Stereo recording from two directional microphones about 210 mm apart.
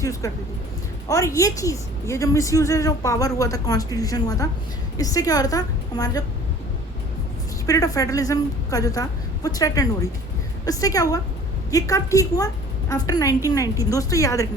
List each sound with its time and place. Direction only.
0.0 s a woman's voice: 15° left (ahead or behind)
7.7 s a woman's voice: 15° left (ahead or behind)